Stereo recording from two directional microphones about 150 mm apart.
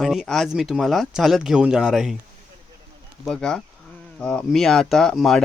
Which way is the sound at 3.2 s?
5° left (ahead or behind).